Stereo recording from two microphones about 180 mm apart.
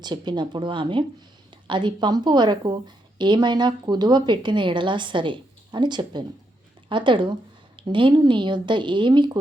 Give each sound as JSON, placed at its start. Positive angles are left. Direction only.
{"t": 0.0, "sound": "a woman's voice", "side_deg": -25}